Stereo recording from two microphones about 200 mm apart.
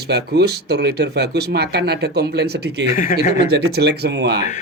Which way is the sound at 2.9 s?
45° left (ahead or behind).